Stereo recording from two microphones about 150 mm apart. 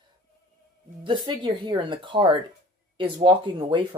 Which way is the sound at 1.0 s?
35° right (ahead or behind).